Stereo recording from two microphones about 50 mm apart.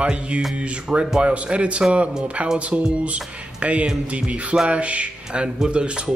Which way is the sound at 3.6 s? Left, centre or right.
Right.